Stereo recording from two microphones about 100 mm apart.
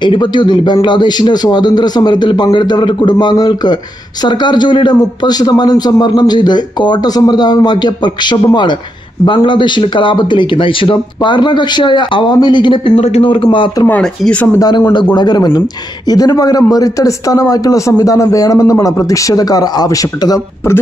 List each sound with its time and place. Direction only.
0.0 s a man's voice: 50° left (ahead or behind)
12.9 s a man's voice: 90° left; by 13.7 s 55° left (ahead or behind)
14.0 s speech: 5° left (ahead or behind)
15.1 s a man's voice: 45° left (ahead or behind)